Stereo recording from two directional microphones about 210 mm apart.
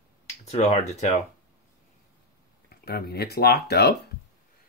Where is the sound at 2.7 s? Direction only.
45° left (ahead or behind).